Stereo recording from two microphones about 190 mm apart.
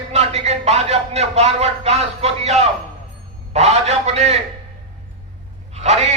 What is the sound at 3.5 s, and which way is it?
Speech, 35° right (ahead or behind).